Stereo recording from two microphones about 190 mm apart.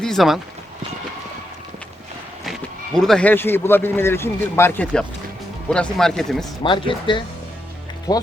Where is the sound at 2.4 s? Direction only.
Centre (ahead or behind).